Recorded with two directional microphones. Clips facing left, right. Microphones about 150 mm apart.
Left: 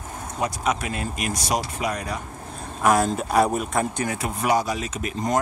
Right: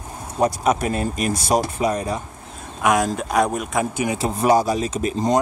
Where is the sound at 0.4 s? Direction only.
40° right (ahead or behind).